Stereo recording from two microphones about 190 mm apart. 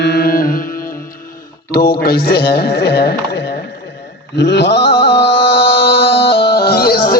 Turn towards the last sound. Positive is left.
turn(degrees=55)  # may be behind; listen again after turning